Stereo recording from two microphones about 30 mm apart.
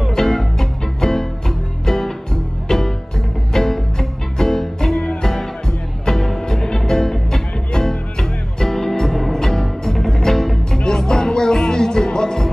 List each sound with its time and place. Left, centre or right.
0.1 s music: centre